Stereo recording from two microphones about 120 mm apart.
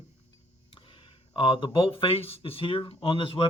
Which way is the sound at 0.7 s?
45° left (ahead or behind).